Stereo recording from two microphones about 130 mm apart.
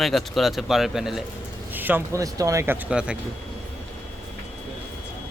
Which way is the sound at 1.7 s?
15° right (ahead or behind).